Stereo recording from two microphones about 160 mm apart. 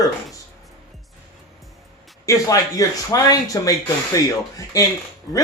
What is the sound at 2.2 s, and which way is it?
Speech, 20° left (ahead or behind).